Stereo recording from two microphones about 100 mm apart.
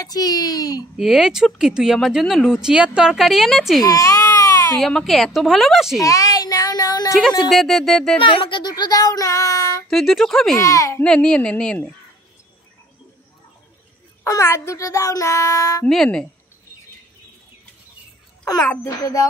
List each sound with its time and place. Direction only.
0.0 s speech: 40° left (ahead or behind)
0.9 s speech: 5° right (ahead or behind)
3.8 s baby cry: 35° left (ahead or behind)
4.7 s speech: 5° left (ahead or behind)
5.9 s a woman's voice: 35° left (ahead or behind)
7.5 s speech: centre (ahead or behind)
8.2 s speech: 60° left (ahead or behind); by 9.8 s 35° left (ahead or behind)
9.8 s speech: centre (ahead or behind)
10.6 s speech: 30° left (ahead or behind)
11.1 s speech: 10° left (ahead or behind)
14.2 s speech: 30° left (ahead or behind)
15.9 s speech: 5° left (ahead or behind)
18.9 s speech: 35° left (ahead or behind)